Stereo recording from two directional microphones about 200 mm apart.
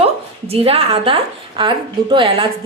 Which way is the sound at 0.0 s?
30° right (ahead or behind).